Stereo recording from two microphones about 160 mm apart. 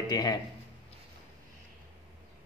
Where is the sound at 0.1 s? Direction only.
25° left (ahead or behind).